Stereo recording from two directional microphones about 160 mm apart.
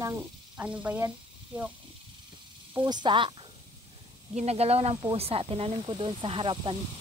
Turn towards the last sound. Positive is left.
turn(degrees=-35)  # may be behind; listen again after turning